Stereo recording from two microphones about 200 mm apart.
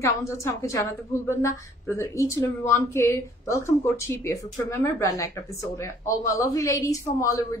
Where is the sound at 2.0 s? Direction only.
15° left (ahead or behind).